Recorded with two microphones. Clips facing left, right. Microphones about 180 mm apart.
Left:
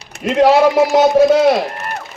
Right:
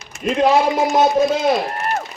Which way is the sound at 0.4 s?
75° left (ahead or behind).